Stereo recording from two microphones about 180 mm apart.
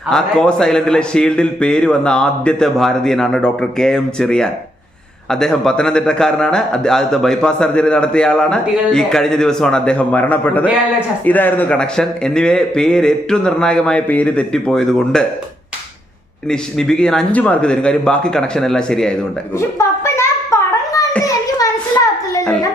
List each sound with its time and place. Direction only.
0.1 s a man's voice: 5° left (ahead or behind)
16.5 s a man's voice: 5° left (ahead or behind)
20.1 s a sound: 15° left (ahead or behind)